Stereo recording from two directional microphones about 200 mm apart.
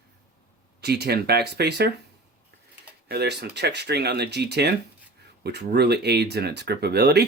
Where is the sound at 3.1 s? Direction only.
55° right (ahead or behind).